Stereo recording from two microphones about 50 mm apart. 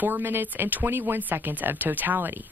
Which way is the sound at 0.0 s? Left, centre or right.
Right.